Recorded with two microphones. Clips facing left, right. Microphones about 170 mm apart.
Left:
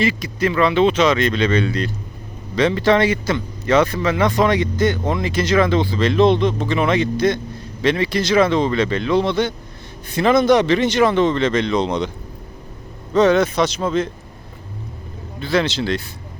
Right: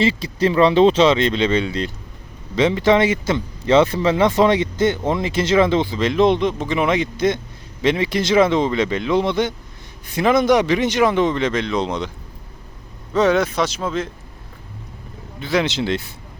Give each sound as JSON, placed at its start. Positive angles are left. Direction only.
{"t": 0.0, "sound": "speech", "side_deg": -30}
{"t": 13.1, "sound": "speech", "side_deg": -5}
{"t": 15.4, "sound": "speech", "side_deg": -20}